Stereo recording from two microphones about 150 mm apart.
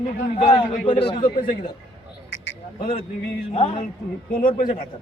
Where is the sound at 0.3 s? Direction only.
35° left (ahead or behind).